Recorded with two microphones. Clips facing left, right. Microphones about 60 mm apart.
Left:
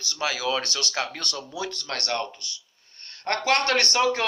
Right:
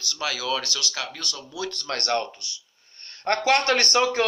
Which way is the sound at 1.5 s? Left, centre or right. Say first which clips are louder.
Right 2 dB; left.